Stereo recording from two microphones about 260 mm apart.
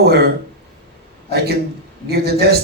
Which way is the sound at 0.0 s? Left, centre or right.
Right.